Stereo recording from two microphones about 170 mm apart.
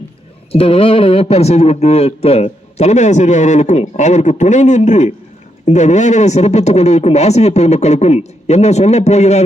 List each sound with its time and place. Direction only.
0.5 s speech: 35° left (ahead or behind)